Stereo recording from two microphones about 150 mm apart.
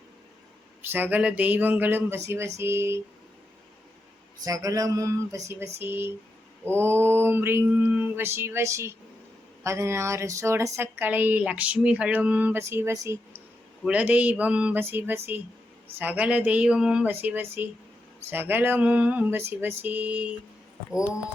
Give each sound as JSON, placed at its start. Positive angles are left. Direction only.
{"t": 0.8, "sound": "a woman's voice", "side_deg": -15}
{"t": 4.4, "sound": "a sound", "side_deg": -20}
{"t": 6.7, "sound": "a woman's voice", "side_deg": -15}